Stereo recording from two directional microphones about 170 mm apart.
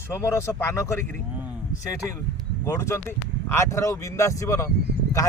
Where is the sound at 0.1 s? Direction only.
15° left (ahead or behind).